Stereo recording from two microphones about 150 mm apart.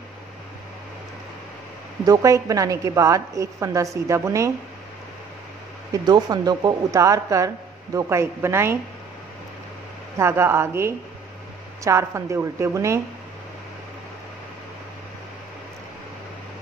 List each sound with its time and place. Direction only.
2.0 s speech: 20° right (ahead or behind)
6.0 s speech: 25° right (ahead or behind)
10.1 s a woman's voice: 15° right (ahead or behind)